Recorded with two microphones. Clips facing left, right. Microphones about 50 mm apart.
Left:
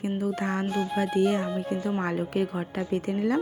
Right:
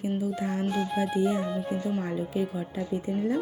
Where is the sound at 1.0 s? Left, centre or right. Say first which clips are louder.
Left 3 dB; left.